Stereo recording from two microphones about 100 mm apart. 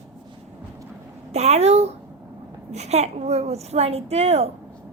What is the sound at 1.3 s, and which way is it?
A woman's voice, 90° right.